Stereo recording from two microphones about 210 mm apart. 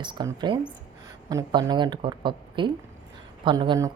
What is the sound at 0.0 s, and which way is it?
Speech, 20° right (ahead or behind).